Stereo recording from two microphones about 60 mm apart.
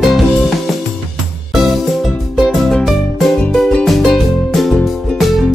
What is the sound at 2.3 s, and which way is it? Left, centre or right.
Music, centre.